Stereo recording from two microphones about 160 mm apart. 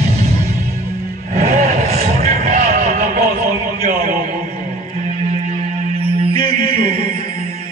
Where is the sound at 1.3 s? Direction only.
50° right (ahead or behind).